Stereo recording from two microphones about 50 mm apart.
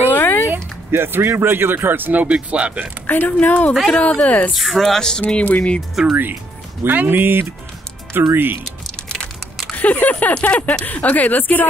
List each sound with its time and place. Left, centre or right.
0.1 s a sound: left
0.5 s speech: right
2.2 s speech: right
3.1 s speech: left
3.9 s speech: left
4.6 s speech: centre
5.2 s speech: left
6.0 s speech: centre
6.8 s speech: right
8.1 s speech: right
8.6 s typing: centre
9.8 s speech: left